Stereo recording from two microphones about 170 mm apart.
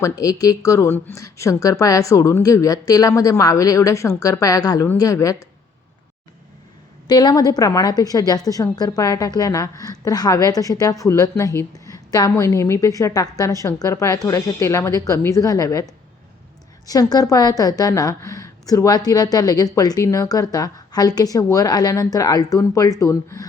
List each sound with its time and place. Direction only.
0.0 s a woman's voice: 20° left (ahead or behind)
7.1 s a woman's voice: 25° left (ahead or behind)